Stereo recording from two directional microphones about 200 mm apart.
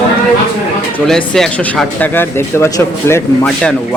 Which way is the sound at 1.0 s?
Centre (ahead or behind).